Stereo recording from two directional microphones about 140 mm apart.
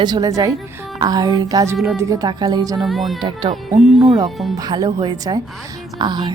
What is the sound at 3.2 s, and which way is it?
Speech, 35° right (ahead or behind).